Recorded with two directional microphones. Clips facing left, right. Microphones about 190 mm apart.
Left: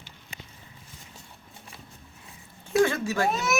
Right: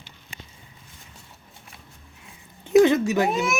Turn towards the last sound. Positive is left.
turn(degrees=-15)  # may be behind; listen again after turning